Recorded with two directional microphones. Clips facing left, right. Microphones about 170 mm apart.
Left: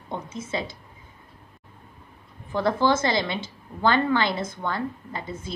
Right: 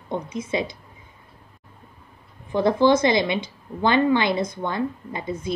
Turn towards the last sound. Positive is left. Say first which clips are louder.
# right 4 dB
turn(degrees=-20)  # may be behind; listen again after turning